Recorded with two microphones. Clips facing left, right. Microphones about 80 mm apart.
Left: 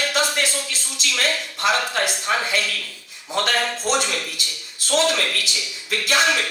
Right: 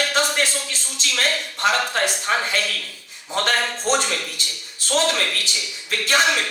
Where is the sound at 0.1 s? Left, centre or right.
Right.